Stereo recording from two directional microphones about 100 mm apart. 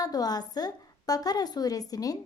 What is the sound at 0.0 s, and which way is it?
A woman's voice, 40° left (ahead or behind).